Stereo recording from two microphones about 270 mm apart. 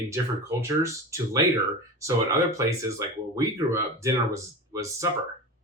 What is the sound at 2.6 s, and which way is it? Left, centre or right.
Speech, centre.